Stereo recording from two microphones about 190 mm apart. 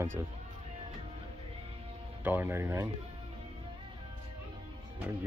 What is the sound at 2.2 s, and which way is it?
Speech, 10° right (ahead or behind).